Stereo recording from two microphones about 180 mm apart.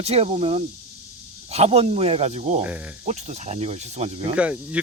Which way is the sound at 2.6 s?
10° right (ahead or behind).